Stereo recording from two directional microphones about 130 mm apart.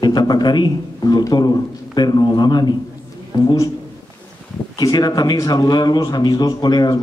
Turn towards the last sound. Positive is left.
turn(degrees=30)  # may be behind; listen again after turning